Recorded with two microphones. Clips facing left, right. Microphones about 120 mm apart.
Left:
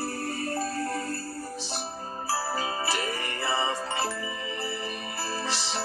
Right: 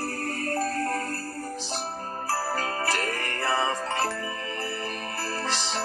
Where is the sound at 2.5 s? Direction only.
5° left (ahead or behind).